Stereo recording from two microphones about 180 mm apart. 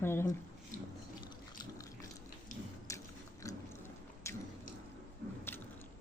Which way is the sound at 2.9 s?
15° left (ahead or behind).